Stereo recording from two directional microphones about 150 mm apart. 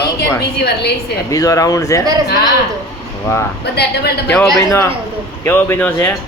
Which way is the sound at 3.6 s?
90° left.